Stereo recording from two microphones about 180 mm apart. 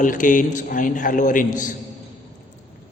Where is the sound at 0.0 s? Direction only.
45° left (ahead or behind).